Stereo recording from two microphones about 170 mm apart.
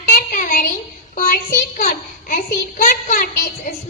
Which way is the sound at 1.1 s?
55° left (ahead or behind).